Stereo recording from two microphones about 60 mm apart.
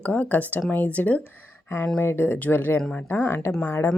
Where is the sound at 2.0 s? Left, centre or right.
Left.